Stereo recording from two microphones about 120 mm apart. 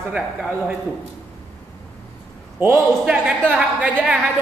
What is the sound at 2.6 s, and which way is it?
Speech, 20° right (ahead or behind).